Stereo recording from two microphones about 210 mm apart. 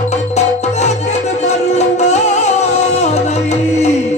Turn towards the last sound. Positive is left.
turn(degrees=30)  # may be behind; listen again after turning